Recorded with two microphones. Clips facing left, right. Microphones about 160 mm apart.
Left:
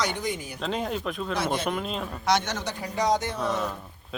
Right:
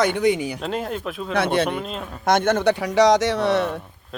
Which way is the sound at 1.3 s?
65° right (ahead or behind).